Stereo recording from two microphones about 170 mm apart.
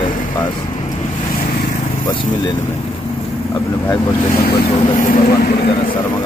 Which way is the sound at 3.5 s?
15° left (ahead or behind).